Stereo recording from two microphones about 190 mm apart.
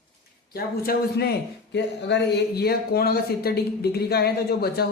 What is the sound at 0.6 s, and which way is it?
Speech, 50° left (ahead or behind).